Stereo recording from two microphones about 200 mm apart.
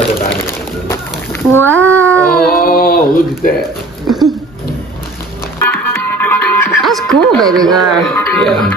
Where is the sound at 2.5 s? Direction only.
45° left (ahead or behind).